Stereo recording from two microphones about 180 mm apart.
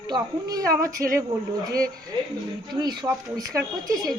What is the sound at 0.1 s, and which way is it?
A woman's voice, 20° right (ahead or behind).